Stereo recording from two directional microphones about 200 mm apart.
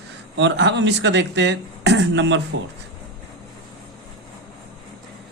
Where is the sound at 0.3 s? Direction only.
60° right (ahead or behind).